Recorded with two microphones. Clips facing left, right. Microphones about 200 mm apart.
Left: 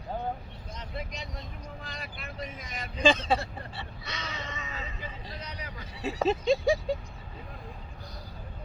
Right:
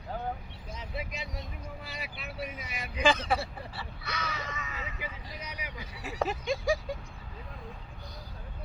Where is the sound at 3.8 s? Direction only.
25° left (ahead or behind).